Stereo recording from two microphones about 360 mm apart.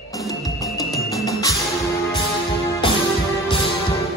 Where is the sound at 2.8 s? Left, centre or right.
Centre.